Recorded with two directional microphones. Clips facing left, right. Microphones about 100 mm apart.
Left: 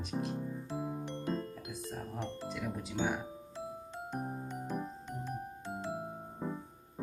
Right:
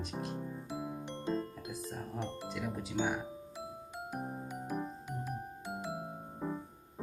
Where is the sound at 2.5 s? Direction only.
Centre (ahead or behind).